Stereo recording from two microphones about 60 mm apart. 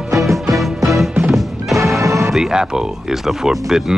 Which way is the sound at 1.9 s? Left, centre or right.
Right.